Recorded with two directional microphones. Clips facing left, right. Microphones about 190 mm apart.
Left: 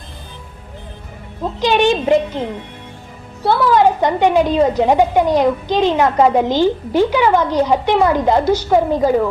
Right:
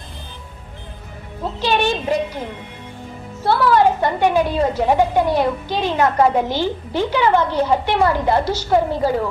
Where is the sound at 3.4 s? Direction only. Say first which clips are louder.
Left 2 dB; 15° left (ahead or behind).